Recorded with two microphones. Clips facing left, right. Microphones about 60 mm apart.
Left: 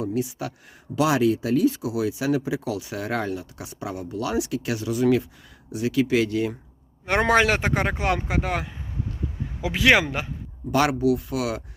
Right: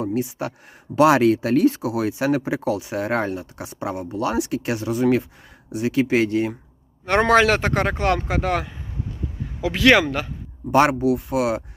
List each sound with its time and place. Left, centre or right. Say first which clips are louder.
0.0 s speech: right 3 dB; right
0.9 s speech: right 5 dB; right
7.0 s speech: right 3 dB; centre
10.7 s speech: right 4 dB; right